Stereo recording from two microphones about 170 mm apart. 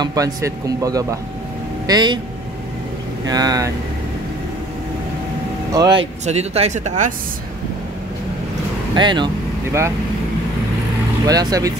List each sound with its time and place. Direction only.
0.0 s speech: 20° right (ahead or behind)
3.3 s speech: 20° right (ahead or behind)
5.8 s speech: 25° right (ahead or behind)
6.2 s speech: 40° right (ahead or behind)
8.9 s speech: 25° right (ahead or behind)
9.7 s speech: 15° right (ahead or behind)
11.2 s speech: 20° right (ahead or behind)